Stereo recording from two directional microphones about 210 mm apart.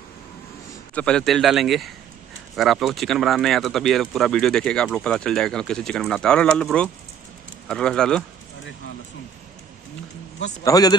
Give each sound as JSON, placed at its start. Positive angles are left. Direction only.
{"t": 0.9, "sound": "speech", "side_deg": 5}
{"t": 10.6, "sound": "speech", "side_deg": 15}